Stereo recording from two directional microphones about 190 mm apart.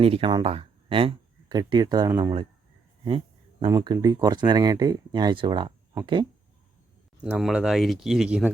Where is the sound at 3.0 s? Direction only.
25° right (ahead or behind).